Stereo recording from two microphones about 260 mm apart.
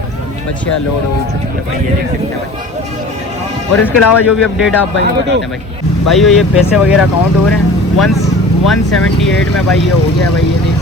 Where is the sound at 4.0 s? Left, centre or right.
Left.